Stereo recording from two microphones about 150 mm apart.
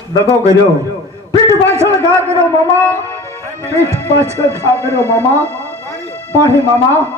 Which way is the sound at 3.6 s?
20° right (ahead or behind).